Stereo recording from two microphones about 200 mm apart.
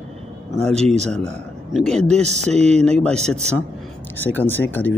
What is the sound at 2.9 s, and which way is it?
Speech, 5° left (ahead or behind).